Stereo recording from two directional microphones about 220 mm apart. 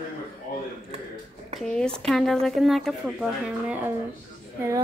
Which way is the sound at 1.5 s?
5° left (ahead or behind).